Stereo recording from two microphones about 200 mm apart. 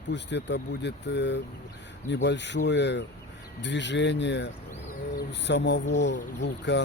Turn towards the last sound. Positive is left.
turn(degrees=60)  # may be behind; listen again after turning